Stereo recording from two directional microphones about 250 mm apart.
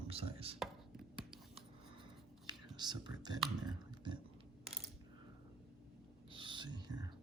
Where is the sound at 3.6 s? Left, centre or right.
Centre.